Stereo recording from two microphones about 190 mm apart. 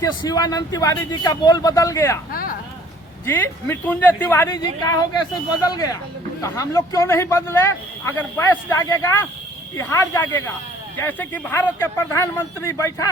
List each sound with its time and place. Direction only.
0.0 s a man's voice: 20° left (ahead or behind)
2.3 s a sound: 50° left (ahead or behind)
3.2 s a man's voice: 10° left (ahead or behind)